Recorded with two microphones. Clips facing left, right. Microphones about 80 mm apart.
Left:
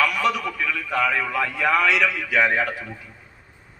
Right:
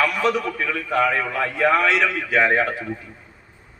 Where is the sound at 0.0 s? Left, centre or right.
Right.